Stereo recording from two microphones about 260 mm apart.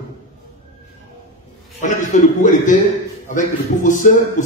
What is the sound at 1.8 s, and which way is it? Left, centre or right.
A man's voice, left.